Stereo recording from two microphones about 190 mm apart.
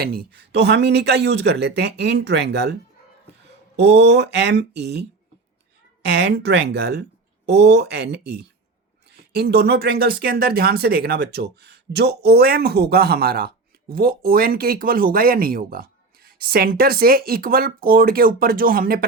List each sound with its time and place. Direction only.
0.0 s speech: 55° right (ahead or behind)
3.8 s speech: 65° right (ahead or behind)